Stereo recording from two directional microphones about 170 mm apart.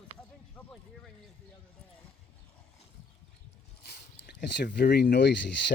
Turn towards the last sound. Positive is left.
turn(degrees=90)